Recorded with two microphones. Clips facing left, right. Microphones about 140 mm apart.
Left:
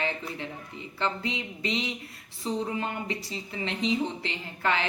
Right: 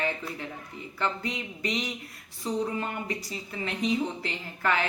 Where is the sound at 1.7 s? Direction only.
30° left (ahead or behind).